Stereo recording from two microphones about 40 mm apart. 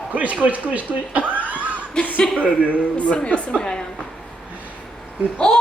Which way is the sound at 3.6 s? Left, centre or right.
Centre.